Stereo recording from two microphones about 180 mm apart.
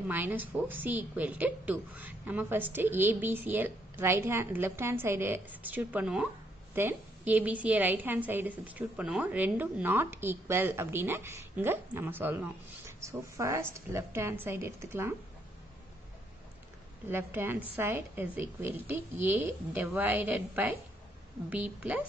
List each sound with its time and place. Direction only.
0.1 s a woman's voice: 10° right (ahead or behind)
17.1 s a woman's voice: 15° right (ahead or behind)